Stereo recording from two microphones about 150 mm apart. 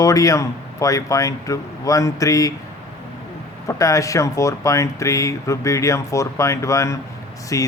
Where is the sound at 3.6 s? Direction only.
20° left (ahead or behind).